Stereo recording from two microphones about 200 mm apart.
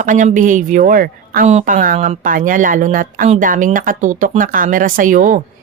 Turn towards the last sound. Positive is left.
turn(degrees=-40)  # may be behind; listen again after turning